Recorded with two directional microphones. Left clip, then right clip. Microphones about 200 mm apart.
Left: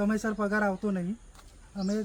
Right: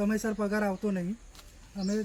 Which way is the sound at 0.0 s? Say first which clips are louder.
Left 1 dB; centre (ahead or behind).